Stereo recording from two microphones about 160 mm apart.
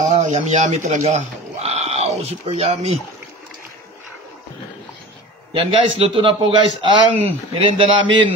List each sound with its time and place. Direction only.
0.1 s speech: 45° right (ahead or behind)
5.5 s a man's voice: 35° right (ahead or behind)